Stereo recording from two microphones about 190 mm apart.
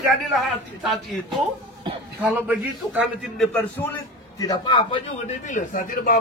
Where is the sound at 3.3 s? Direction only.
5° left (ahead or behind); by 5.4 s 25° left (ahead or behind).